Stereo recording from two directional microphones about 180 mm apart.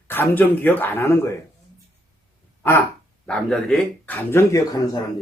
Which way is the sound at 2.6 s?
10° left (ahead or behind).